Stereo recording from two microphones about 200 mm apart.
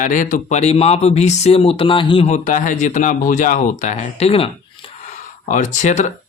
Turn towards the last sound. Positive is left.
turn(degrees=35)  # may be behind; listen again after turning